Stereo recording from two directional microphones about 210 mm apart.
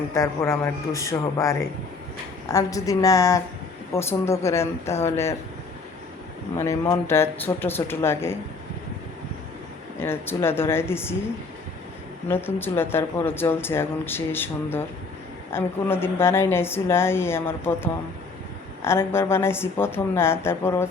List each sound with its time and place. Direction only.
0.1 s speech: 15° left (ahead or behind)
6.6 s speech: 15° left (ahead or behind)
10.0 s speech: 10° left (ahead or behind)
12.3 s speech: 10° left (ahead or behind)
18.9 s speech: 10° left (ahead or behind)